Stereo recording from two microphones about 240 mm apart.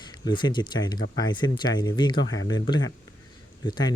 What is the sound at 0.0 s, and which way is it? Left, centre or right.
Speech, centre.